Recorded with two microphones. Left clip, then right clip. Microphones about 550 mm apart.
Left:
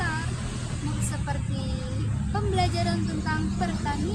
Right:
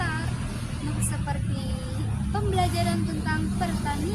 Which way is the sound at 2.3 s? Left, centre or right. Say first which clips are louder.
Right 1 dB; right.